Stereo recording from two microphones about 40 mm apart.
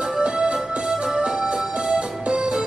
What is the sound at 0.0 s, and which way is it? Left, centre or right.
Music, right.